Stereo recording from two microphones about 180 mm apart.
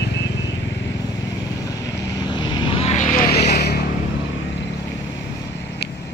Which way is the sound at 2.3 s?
25° left (ahead or behind).